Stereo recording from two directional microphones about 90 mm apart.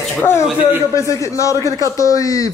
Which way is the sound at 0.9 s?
35° left (ahead or behind).